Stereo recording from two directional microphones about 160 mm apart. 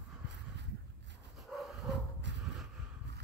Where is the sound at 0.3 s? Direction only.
90° right.